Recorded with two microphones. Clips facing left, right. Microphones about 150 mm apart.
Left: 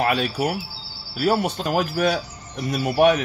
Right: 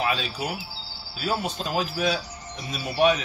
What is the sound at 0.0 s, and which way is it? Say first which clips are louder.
A man's voice: left 6 dB; 60° left (ahead or behind).